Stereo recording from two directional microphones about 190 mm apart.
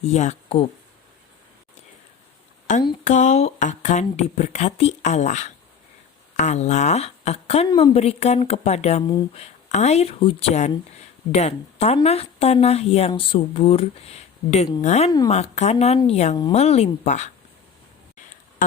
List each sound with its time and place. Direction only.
0.0 s speech: 35° left (ahead or behind)
3.1 s speech: 40° left (ahead or behind)